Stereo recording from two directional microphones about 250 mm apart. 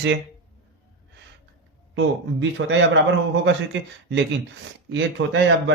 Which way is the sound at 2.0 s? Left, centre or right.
Right.